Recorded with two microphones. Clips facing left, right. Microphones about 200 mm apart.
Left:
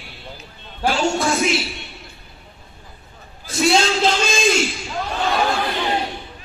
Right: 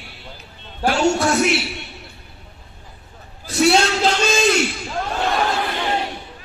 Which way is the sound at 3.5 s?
65° right (ahead or behind).